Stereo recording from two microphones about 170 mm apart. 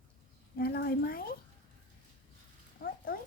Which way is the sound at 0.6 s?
65° left (ahead or behind).